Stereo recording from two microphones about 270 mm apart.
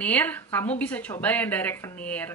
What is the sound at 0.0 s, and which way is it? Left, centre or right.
Speech, centre.